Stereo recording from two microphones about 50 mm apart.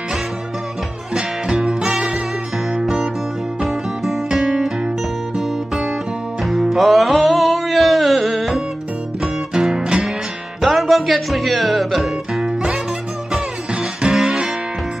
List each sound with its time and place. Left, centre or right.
1.1 s music: centre
10.6 s music: centre
12.4 s music: centre